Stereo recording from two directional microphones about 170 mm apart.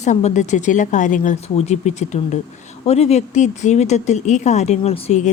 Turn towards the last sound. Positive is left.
turn(degrees=40)  # may be behind; listen again after turning